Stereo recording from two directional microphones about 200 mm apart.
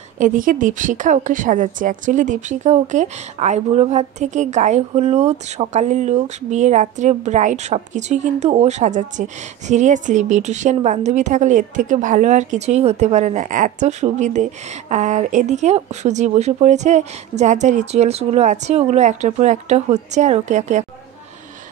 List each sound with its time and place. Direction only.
0.2 s a woman's voice: 40° right (ahead or behind)